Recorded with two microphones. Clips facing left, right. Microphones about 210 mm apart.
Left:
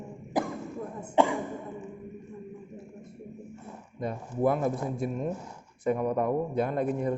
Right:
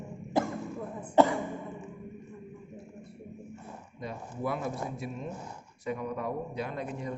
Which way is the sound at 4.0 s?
50° left (ahead or behind).